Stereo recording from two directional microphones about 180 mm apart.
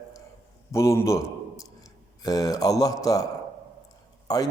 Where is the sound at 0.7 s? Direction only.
15° left (ahead or behind).